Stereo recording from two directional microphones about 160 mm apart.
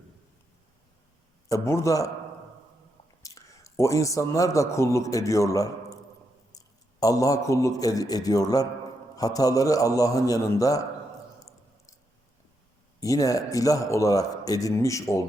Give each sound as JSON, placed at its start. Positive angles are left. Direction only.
{"t": 1.5, "sound": "speech", "side_deg": 20}
{"t": 3.2, "sound": "a man's voice", "side_deg": 20}
{"t": 13.0, "sound": "speech", "side_deg": 20}